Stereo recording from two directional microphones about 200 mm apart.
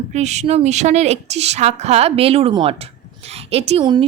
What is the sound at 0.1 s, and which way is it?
A woman's voice, 35° right (ahead or behind).